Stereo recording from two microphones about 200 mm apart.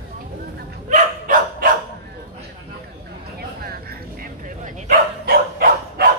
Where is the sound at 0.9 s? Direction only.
40° right (ahead or behind).